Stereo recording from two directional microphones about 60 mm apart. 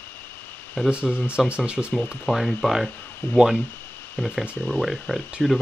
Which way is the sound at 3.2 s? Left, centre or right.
Left.